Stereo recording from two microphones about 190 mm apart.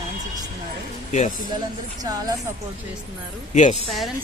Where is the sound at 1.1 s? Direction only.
40° left (ahead or behind).